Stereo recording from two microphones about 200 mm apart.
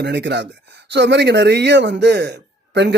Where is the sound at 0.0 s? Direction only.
60° right (ahead or behind).